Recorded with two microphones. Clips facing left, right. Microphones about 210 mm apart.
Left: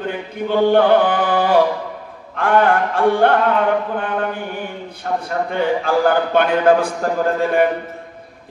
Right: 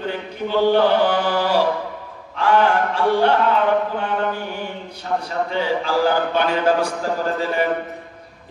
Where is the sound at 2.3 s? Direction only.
55° left (ahead or behind).